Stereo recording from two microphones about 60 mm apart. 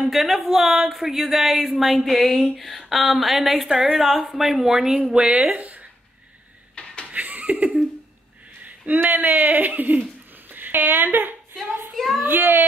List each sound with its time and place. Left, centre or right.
0.0 s speech: centre; by 5.9 s right
6.7 s vehicle: centre
7.1 s laughter: right
8.6 s speech: right
11.9 s a sound: centre
12.2 s speech: right